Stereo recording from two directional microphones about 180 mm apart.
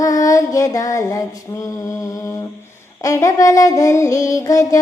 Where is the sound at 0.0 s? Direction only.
20° left (ahead or behind).